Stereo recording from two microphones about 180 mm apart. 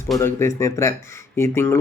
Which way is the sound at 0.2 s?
15° left (ahead or behind).